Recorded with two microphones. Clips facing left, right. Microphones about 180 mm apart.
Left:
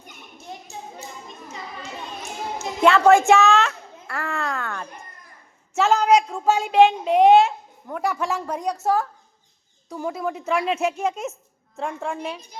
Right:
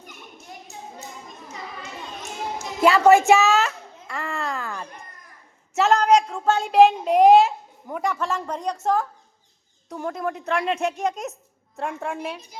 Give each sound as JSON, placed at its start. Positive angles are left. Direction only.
{"t": 2.8, "sound": "a sound", "side_deg": -5}
{"t": 5.7, "sound": "a woman's voice", "side_deg": 0}
{"t": 8.1, "sound": "a woman's voice", "side_deg": 10}